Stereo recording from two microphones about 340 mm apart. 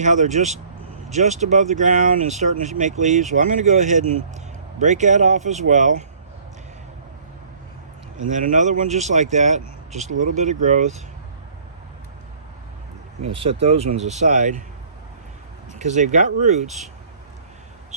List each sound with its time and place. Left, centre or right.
0.0 s speech: right
8.2 s speech: right
13.3 s speech: centre
15.8 s speech: right